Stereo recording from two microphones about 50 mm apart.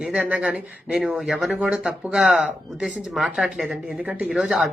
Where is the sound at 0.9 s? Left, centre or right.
Centre.